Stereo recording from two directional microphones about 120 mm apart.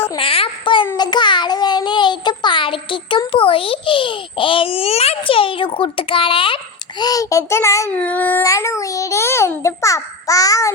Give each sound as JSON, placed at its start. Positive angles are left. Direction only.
{"t": 0.2, "sound": "a sound", "side_deg": 50}
{"t": 0.9, "sound": "child singing", "side_deg": 35}
{"t": 3.3, "sound": "a child's voice", "side_deg": 50}
{"t": 7.0, "sound": "a child's voice", "side_deg": 30}
{"t": 7.9, "sound": "a sound", "side_deg": 10}
{"t": 8.4, "sound": "a child's voice", "side_deg": 25}